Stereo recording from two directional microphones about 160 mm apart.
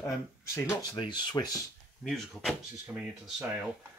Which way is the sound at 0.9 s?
25° left (ahead or behind).